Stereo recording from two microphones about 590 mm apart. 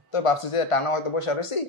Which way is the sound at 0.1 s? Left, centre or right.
Left.